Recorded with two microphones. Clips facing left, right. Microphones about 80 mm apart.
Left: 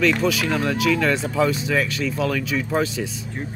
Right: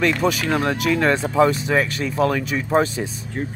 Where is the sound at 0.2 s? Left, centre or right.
Right.